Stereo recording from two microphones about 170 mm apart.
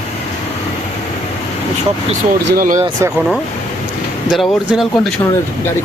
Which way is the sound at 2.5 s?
55° right (ahead or behind).